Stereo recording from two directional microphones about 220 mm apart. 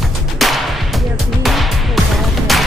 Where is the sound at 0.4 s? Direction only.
Centre (ahead or behind).